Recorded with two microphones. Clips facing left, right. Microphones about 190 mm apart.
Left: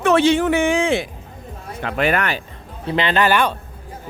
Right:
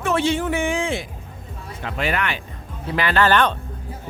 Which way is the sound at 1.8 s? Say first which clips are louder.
Left 5 dB; 55° left (ahead or behind).